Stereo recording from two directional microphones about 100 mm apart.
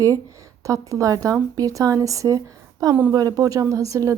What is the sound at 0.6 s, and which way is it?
A woman's voice, 35° right (ahead or behind).